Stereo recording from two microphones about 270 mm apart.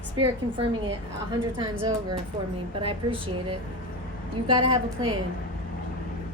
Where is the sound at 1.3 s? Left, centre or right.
Centre.